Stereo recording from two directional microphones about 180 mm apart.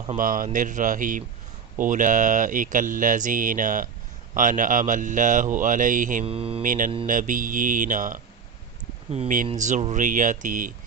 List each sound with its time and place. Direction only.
0.0 s speech: 45° right (ahead or behind)
6.2 s mantra: 30° right (ahead or behind)
6.6 s speech: 45° right (ahead or behind)
9.1 s mantra: 40° right (ahead or behind)
9.5 s speech: 40° right (ahead or behind)